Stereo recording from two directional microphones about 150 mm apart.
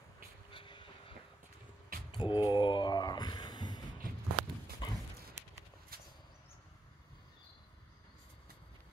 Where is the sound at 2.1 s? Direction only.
30° left (ahead or behind).